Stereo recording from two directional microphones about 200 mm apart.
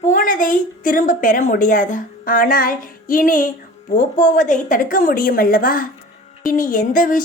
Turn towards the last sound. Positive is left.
turn(degrees=40)  # may be behind; listen again after turning